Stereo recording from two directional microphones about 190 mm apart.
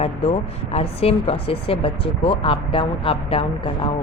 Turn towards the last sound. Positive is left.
turn(degrees=30)  # may be behind; listen again after turning